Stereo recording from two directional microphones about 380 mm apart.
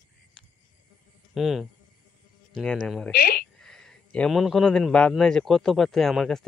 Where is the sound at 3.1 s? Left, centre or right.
Left.